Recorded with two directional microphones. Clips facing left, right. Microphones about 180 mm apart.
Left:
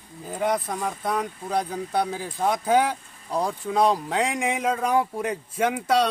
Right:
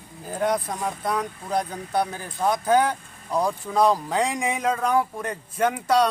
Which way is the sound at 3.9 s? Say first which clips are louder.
Right 1 dB; centre (ahead or behind).